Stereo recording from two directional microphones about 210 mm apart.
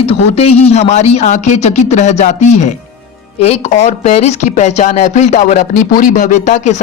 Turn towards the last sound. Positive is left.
turn(degrees=35)  # may be behind; listen again after turning